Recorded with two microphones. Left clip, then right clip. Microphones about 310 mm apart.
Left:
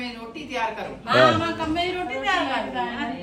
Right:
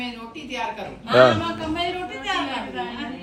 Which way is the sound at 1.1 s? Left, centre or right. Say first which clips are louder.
Right 2 dB; right.